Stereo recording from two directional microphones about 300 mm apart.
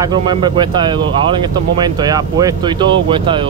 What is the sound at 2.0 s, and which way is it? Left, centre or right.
Speech, centre.